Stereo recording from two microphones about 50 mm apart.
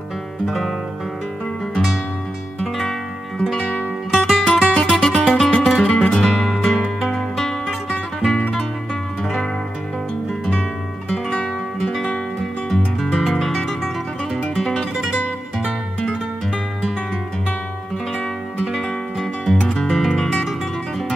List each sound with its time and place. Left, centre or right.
0.5 s music: centre
3.3 s music: centre
5.9 s music: centre
11.1 s guitar: centre
12.6 s music: centre
14.4 s guitar: centre
15.6 s music: centre
18.7 s music: centre
19.7 s music: centre